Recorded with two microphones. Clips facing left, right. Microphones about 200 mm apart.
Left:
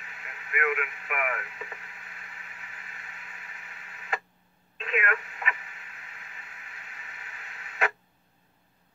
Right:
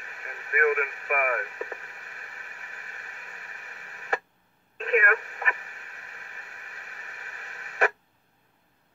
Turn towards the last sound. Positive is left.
turn(degrees=-40)  # may be behind; listen again after turning